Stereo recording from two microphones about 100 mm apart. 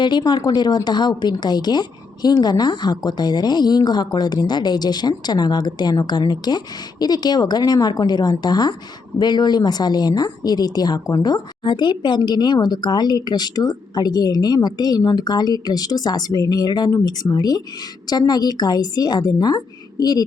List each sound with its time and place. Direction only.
0.0 s speech: 45° left (ahead or behind)